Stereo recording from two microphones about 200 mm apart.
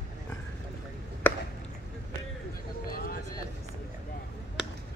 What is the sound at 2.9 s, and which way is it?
Vehicle, 45° left (ahead or behind).